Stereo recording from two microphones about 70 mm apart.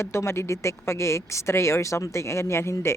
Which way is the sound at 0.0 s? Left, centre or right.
Left.